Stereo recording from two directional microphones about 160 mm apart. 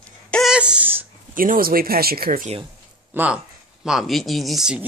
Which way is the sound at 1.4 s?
65° right (ahead or behind).